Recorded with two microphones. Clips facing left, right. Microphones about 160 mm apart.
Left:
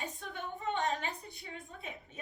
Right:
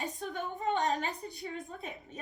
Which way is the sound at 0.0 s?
40° right (ahead or behind).